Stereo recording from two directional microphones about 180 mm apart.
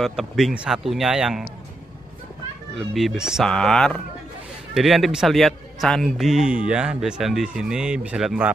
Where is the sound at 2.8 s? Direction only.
Centre (ahead or behind).